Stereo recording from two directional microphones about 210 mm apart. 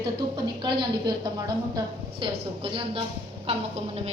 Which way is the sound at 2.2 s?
25° right (ahead or behind).